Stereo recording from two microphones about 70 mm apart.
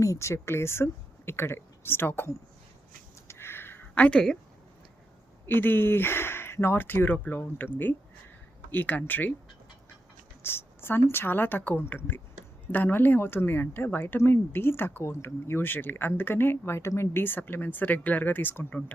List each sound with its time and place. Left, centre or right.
0.0 s speech: left
3.2 s a sound: left
5.5 s speech: left
10.4 s speech: left